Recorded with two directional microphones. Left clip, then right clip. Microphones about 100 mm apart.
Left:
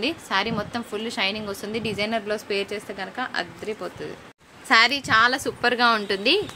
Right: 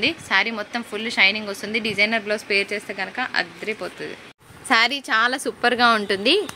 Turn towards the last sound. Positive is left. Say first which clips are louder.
# right 2 dB
turn(degrees=-35)  # may be behind; listen again after turning